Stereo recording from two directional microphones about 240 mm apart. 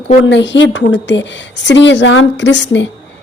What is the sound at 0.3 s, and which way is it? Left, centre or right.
A woman's voice, left.